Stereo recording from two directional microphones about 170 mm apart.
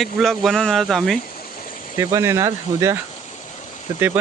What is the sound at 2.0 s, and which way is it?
Speech, 15° right (ahead or behind).